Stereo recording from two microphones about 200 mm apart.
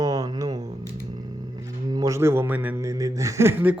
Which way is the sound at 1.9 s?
15° right (ahead or behind).